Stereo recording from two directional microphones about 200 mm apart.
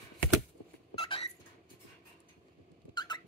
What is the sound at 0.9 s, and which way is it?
Squeak, 25° left (ahead or behind).